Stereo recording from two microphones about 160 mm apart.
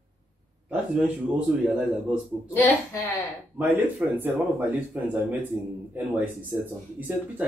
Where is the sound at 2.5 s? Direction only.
15° left (ahead or behind).